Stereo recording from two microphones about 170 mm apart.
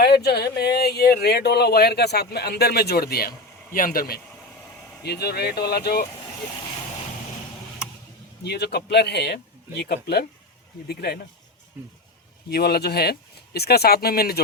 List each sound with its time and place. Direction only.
0.0 s speech: 70° left (ahead or behind)
5.0 s speech: 70° left (ahead or behind)
8.4 s speech: 80° left
12.5 s speech: 65° left (ahead or behind)